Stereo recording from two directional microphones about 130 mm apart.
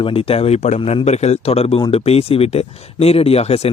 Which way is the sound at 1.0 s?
60° left (ahead or behind).